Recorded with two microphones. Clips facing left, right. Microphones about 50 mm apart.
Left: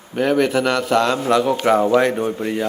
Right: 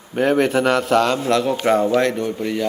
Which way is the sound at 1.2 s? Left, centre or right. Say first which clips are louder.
Left 2 dB; centre.